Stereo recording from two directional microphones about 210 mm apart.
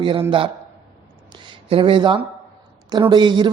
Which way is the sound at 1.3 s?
25° right (ahead or behind).